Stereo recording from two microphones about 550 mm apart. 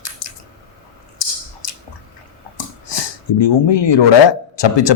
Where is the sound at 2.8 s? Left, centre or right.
Left.